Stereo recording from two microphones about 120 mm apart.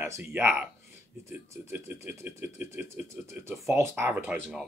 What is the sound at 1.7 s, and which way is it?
Speech, 20° right (ahead or behind).